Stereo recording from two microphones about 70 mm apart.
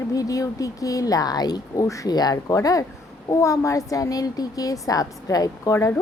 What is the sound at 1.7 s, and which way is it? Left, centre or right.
Speech, left.